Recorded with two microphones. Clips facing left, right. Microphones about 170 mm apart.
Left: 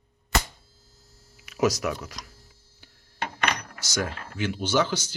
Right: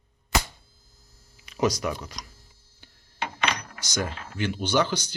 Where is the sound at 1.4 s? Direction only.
5° left (ahead or behind).